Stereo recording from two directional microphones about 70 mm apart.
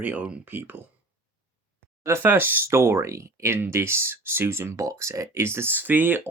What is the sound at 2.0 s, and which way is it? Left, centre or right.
Speech, right.